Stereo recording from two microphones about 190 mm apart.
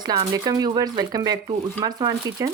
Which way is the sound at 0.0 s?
20° right (ahead or behind).